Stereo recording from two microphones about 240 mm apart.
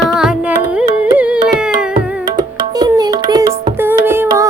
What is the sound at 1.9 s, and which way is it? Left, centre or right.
Music, centre.